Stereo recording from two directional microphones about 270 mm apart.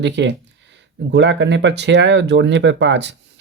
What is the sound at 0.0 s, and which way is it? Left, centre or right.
Speech, right.